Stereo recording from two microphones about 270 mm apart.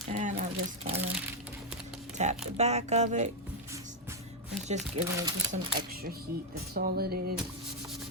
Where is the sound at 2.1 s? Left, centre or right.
Right.